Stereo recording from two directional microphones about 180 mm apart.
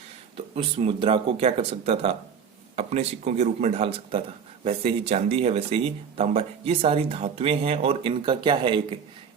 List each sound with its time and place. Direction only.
0.3 s speech: 35° right (ahead or behind)